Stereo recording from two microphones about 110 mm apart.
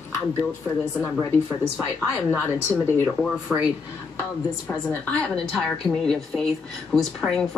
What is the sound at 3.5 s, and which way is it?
Speech, 5° right (ahead or behind).